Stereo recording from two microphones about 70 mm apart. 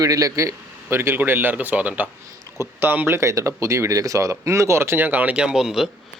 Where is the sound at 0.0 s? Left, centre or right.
Right.